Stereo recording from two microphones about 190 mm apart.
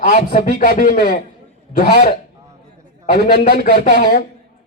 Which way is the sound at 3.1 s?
50° left (ahead or behind).